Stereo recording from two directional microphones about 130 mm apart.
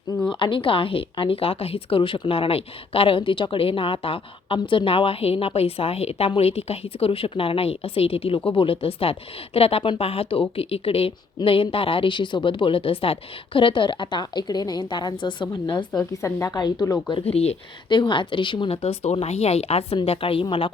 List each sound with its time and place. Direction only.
0.3 s a woman's voice: 40° left (ahead or behind)
17.2 s speech: 50° left (ahead or behind)
17.8 s speech: 35° left (ahead or behind)